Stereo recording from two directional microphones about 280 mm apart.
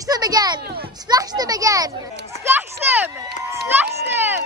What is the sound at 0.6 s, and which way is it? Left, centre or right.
Speech, right.